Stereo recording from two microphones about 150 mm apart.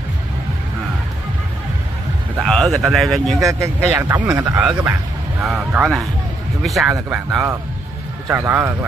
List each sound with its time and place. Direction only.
2.4 s speech: centre (ahead or behind)
3.4 s speech: 15° right (ahead or behind)
8.3 s speech: 15° right (ahead or behind)